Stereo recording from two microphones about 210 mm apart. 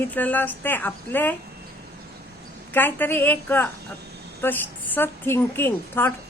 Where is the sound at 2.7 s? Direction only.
10° left (ahead or behind).